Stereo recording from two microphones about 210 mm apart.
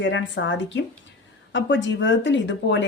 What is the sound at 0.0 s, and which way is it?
A woman's voice, 60° left (ahead or behind).